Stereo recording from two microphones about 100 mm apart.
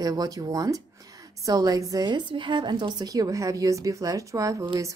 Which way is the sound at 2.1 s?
50° right (ahead or behind).